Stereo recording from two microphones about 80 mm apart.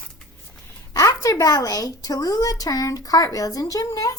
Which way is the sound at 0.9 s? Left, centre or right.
Left.